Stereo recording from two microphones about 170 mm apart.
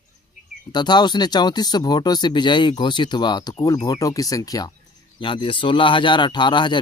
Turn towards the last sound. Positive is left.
turn(degrees=25)  # may be behind; listen again after turning